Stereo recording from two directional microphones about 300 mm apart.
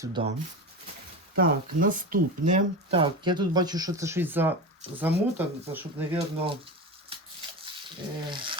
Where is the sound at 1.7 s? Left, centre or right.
Right; by 6.2 s centre.